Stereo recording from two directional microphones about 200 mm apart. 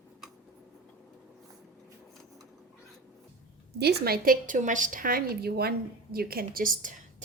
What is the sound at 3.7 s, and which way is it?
A woman's voice, 50° right (ahead or behind).